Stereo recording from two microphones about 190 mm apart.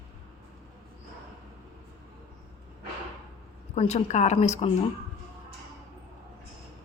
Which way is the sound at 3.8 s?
35° left (ahead or behind).